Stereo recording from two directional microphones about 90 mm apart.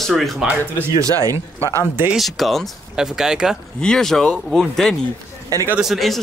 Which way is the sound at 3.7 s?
10° left (ahead or behind).